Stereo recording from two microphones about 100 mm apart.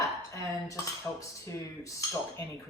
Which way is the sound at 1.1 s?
20° left (ahead or behind).